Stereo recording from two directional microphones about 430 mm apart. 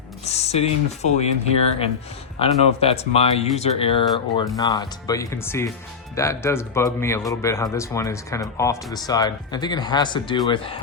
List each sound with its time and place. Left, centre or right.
0.3 s speech: centre